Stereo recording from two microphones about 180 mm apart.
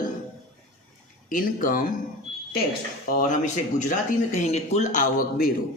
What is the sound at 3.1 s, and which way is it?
Speech, 50° left (ahead or behind).